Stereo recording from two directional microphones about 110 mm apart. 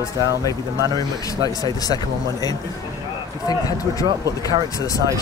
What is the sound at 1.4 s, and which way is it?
Speech, 35° left (ahead or behind).